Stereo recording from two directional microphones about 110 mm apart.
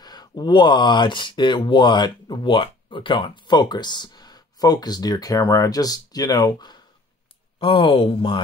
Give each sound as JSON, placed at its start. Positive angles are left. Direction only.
{"t": 0.0, "sound": "speech", "side_deg": 40}
{"t": 7.5, "sound": "speech", "side_deg": 55}